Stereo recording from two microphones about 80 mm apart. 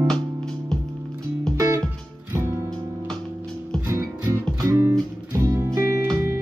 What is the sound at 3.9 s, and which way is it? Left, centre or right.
Music, right.